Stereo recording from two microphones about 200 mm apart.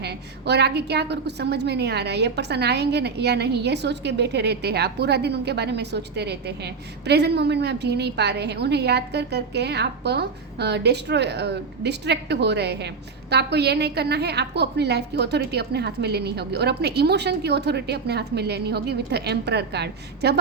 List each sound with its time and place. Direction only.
0.0 s a woman's voice: 55° right (ahead or behind)